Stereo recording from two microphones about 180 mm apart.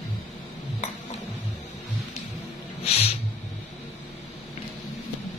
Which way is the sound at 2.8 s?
35° left (ahead or behind).